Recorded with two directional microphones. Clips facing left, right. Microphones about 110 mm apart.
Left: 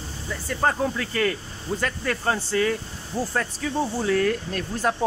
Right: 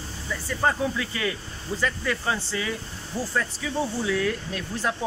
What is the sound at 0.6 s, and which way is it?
Speech, 50° left (ahead or behind).